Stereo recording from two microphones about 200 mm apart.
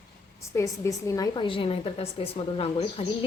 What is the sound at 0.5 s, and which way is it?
A woman's voice, 15° left (ahead or behind).